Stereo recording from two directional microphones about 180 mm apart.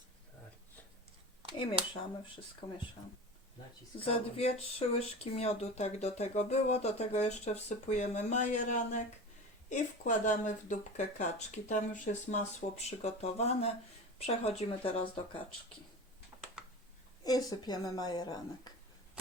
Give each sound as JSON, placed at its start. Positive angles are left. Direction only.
{"t": 2.6, "sound": "a woman's voice", "side_deg": 25}
{"t": 4.0, "sound": "a woman's voice", "side_deg": 35}
{"t": 17.2, "sound": "a woman's voice", "side_deg": 20}